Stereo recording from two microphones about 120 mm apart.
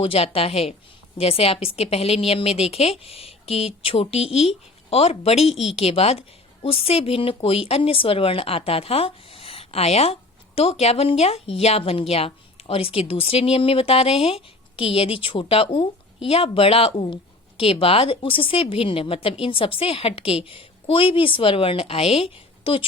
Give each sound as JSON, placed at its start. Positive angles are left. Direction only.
{"t": 0.0, "sound": "a woman's voice", "side_deg": 50}